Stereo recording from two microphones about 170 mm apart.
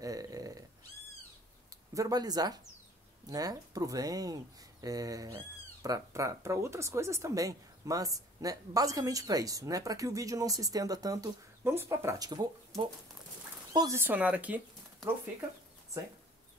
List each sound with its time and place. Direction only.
0.0 s cat: 20° right (ahead or behind)
2.0 s speech: 20° right (ahead or behind)
13.7 s speech: 15° right (ahead or behind)